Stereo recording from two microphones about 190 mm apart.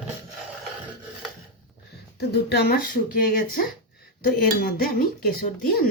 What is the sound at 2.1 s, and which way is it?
Speech, 60° left (ahead or behind).